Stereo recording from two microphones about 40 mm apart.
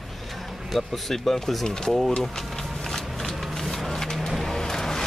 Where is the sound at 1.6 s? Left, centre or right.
Centre.